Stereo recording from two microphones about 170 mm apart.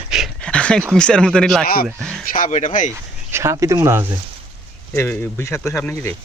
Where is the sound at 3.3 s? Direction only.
15° right (ahead or behind).